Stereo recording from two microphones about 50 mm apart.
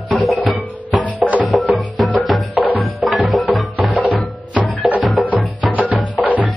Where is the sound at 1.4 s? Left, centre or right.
Centre.